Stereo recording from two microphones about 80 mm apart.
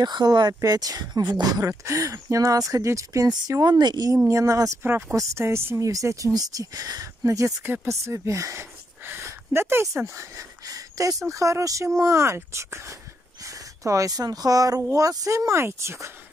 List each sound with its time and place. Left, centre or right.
0.0 s speech: right
0.6 s speech: right
4.3 s speech: right
4.8 s speech: right
5.8 s speech: right
7.6 s speech: right
7.9 s speech: right
9.0 s speech: right